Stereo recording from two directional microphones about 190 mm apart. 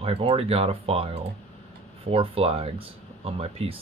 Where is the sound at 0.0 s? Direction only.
30° right (ahead or behind).